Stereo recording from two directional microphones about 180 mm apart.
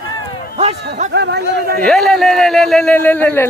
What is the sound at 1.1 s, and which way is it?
Speech, 65° right (ahead or behind).